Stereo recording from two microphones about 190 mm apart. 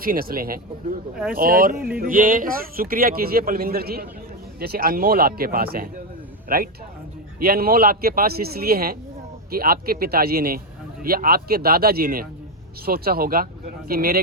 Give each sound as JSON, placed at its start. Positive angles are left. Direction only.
{"t": 0.0, "sound": "speech", "side_deg": -50}
{"t": 7.3, "sound": "speech", "side_deg": -50}